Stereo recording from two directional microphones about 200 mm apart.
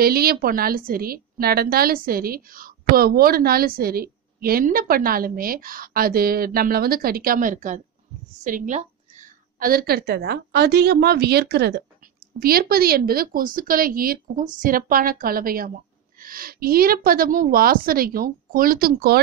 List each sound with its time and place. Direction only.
0.0 s a woman's voice: 50° right (ahead or behind)